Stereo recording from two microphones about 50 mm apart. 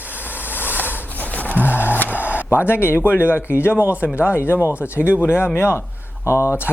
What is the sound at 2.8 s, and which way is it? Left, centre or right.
Speech, left.